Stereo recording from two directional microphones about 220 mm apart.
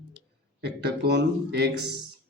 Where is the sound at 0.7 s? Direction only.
50° right (ahead or behind).